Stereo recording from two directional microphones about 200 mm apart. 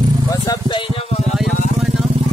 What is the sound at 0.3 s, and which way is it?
Vehicle, 20° left (ahead or behind).